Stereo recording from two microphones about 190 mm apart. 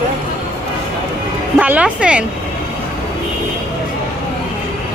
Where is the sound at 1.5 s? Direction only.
5° right (ahead or behind).